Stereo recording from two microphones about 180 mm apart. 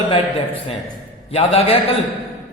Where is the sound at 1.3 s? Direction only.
35° left (ahead or behind).